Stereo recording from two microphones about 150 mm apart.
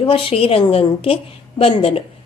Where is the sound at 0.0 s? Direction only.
35° left (ahead or behind).